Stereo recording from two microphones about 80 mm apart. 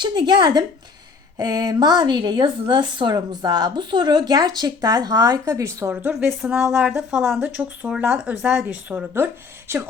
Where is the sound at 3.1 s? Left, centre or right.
Right.